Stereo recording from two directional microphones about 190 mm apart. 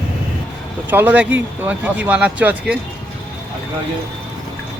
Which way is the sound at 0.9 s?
10° right (ahead or behind).